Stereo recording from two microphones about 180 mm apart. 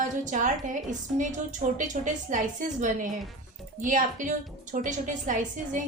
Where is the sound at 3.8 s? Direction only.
45° right (ahead or behind).